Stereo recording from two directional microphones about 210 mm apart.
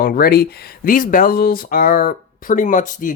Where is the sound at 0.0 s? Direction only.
45° left (ahead or behind).